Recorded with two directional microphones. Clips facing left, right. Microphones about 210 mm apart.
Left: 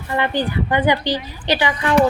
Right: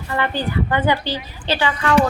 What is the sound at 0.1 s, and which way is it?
A woman's voice, 15° left (ahead or behind).